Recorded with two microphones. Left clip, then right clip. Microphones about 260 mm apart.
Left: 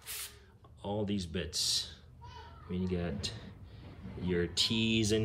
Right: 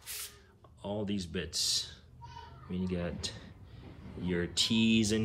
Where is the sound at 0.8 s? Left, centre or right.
Centre.